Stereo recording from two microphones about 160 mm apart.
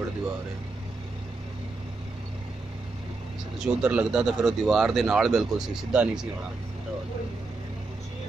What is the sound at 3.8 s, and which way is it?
Speech, 10° right (ahead or behind).